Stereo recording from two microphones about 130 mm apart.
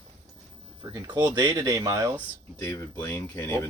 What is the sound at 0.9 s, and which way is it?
Speech, 30° right (ahead or behind).